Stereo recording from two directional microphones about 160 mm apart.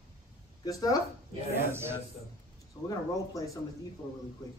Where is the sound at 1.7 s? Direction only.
15° right (ahead or behind).